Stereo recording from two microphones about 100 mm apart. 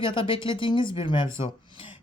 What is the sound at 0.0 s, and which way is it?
Speech, 55° left (ahead or behind).